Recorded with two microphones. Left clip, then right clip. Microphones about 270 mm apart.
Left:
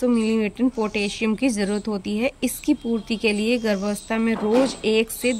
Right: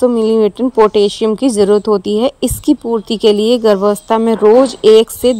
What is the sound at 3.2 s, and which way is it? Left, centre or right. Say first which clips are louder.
Speech: right 12 dB; right.